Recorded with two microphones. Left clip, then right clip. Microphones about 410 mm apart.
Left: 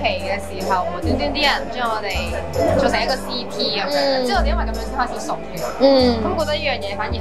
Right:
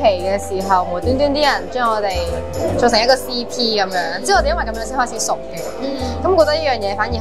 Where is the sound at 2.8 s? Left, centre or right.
Right.